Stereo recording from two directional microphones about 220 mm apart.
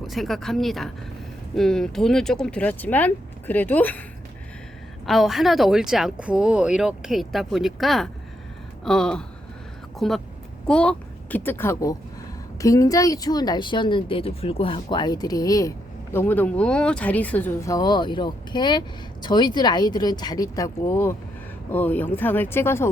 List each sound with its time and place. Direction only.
0.1 s speech: centre (ahead or behind)
5.0 s a child's voice: centre (ahead or behind)